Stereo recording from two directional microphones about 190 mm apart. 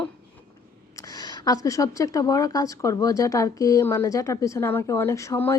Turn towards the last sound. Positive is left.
turn(degrees=15)  # may be behind; listen again after turning